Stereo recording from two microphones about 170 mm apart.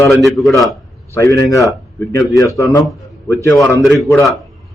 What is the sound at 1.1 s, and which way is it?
A man's voice, 15° left (ahead or behind).